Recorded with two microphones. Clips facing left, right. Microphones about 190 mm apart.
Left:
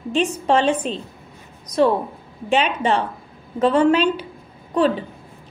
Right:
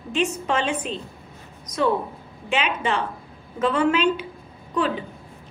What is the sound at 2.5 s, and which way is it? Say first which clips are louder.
A woman's voice: left 5 dB; 35° left (ahead or behind).